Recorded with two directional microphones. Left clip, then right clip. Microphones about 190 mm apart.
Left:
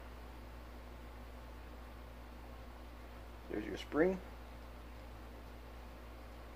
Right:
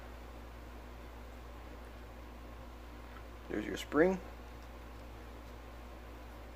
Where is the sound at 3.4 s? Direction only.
25° right (ahead or behind).